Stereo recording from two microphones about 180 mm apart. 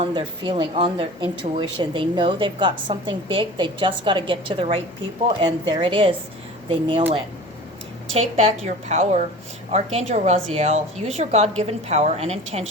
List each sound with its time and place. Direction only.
0.0 s speech: 30° right (ahead or behind)
8.1 s a woman's voice: 35° right (ahead or behind)